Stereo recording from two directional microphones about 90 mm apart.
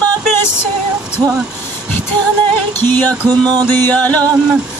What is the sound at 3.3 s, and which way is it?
Music, 50° right (ahead or behind).